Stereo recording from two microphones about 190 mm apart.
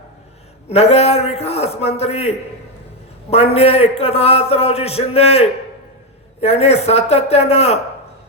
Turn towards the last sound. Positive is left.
turn(degrees=35)  # may be behind; listen again after turning